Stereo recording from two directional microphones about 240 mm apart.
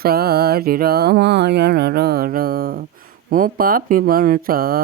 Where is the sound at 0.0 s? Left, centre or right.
Right.